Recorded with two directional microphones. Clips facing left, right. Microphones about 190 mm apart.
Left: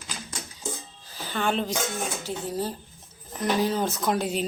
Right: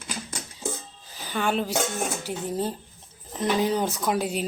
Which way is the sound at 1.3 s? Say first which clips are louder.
Right 1 dB; 10° right (ahead or behind).